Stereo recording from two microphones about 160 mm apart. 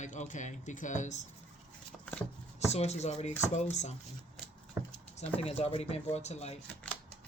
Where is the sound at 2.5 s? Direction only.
45° left (ahead or behind).